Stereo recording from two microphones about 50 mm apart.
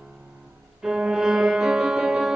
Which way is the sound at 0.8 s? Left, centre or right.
Centre.